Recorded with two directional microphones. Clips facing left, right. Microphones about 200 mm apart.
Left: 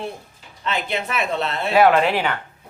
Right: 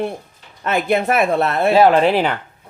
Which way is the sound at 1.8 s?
35° right (ahead or behind).